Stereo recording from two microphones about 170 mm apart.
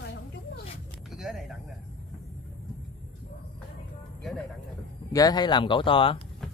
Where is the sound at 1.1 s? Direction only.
5° right (ahead or behind).